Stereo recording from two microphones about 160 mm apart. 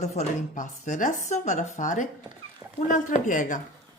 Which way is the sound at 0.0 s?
45° left (ahead or behind).